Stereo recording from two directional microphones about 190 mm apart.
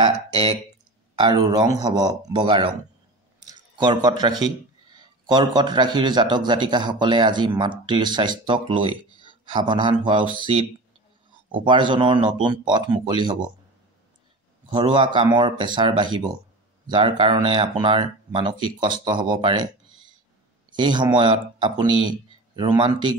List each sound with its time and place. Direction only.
0.0 s speech: 30° right (ahead or behind)
14.7 s speech: 25° right (ahead or behind)
20.7 s speech: 25° right (ahead or behind)